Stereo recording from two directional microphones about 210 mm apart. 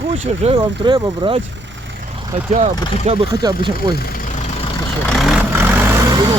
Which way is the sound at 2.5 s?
30° right (ahead or behind).